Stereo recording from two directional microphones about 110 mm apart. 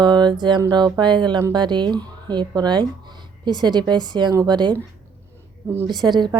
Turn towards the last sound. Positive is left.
turn(degrees=-45)  # may be behind; listen again after turning